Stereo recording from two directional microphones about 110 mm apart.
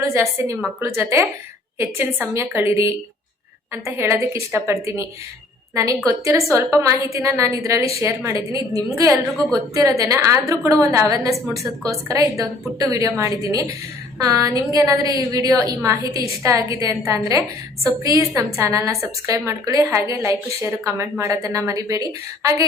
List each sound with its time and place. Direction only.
0.0 s a woman's voice: 25° right (ahead or behind)